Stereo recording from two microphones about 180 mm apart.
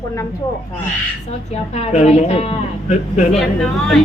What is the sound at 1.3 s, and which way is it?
A woman's voice, 35° left (ahead or behind).